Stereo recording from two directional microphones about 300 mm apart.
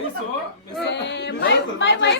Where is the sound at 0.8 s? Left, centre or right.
Left.